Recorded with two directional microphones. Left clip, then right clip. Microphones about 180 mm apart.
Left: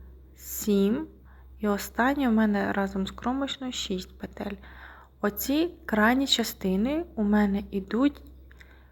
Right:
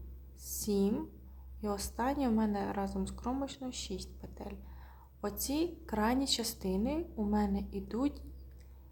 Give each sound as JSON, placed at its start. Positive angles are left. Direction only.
{"t": 0.6, "sound": "a woman's voice", "side_deg": 15}